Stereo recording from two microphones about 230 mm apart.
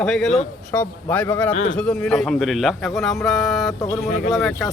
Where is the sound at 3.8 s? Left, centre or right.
Centre.